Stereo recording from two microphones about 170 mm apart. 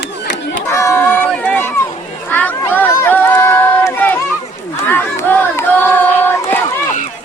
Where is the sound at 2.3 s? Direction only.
10° left (ahead or behind).